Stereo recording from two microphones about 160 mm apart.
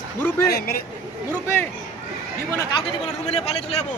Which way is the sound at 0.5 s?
75° left (ahead or behind).